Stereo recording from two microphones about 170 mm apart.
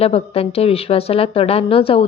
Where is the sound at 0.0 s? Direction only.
35° left (ahead or behind).